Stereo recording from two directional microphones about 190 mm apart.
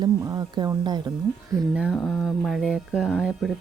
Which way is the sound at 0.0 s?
20° right (ahead or behind).